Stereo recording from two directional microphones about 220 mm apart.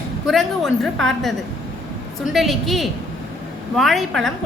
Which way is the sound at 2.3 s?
Centre (ahead or behind).